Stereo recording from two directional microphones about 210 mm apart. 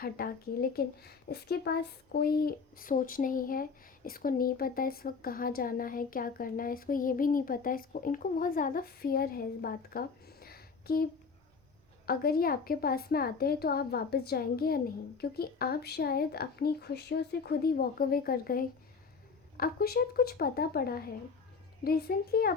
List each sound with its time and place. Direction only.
0.0 s speech: 45° left (ahead or behind)
12.0 s speech: 45° left (ahead or behind)